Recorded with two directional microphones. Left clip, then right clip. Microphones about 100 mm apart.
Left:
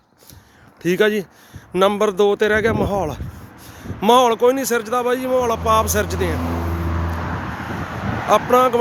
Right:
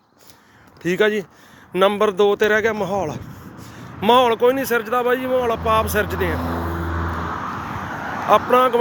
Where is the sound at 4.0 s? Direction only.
45° left (ahead or behind).